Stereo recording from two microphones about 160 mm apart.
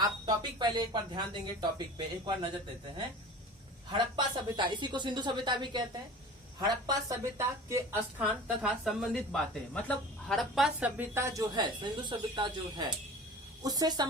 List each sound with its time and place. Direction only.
0.0 s speech: 25° right (ahead or behind)
3.9 s speech: 30° right (ahead or behind)
8.6 s a woman's voice: 5° right (ahead or behind); by 14.1 s 25° right (ahead or behind)